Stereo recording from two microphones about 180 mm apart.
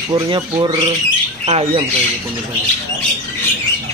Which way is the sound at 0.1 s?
25° right (ahead or behind).